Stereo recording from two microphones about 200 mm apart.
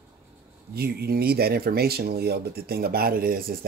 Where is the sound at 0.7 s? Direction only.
50° right (ahead or behind).